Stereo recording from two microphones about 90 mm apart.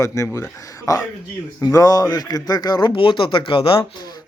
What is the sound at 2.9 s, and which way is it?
Speech, 70° left (ahead or behind).